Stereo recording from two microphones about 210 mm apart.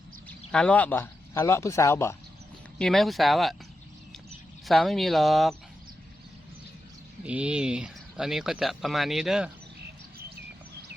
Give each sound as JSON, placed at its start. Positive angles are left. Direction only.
{"t": 0.3, "sound": "speech", "side_deg": 5}
{"t": 2.7, "sound": "speech", "side_deg": 0}
{"t": 4.6, "sound": "speech", "side_deg": 0}
{"t": 7.3, "sound": "speech", "side_deg": -5}